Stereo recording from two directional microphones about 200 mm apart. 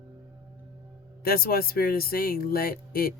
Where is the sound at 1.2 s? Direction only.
50° left (ahead or behind).